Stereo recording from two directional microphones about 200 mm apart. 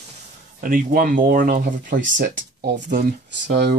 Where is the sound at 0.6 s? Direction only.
45° right (ahead or behind).